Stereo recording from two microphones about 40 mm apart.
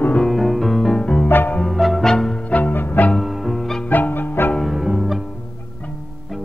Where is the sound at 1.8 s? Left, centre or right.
Centre.